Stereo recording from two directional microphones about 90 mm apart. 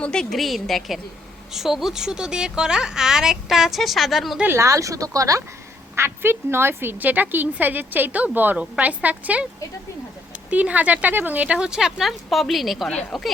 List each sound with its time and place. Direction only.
0.0 s speech: 10° left (ahead or behind)
4.4 s speech: 35° right (ahead or behind)
6.0 s speech: 30° right (ahead or behind)
10.5 s speech: 15° right (ahead or behind); by 13.3 s 5° left (ahead or behind)